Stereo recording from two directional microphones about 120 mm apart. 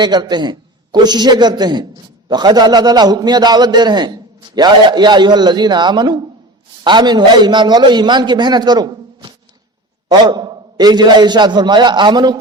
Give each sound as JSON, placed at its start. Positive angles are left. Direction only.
{"t": 0.0, "sound": "a man's voice", "side_deg": -35}